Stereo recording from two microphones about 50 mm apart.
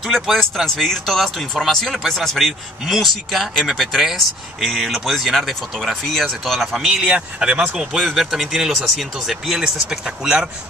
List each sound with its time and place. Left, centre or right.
0.1 s speech: centre
7.0 s speech: centre
8.0 s speech: centre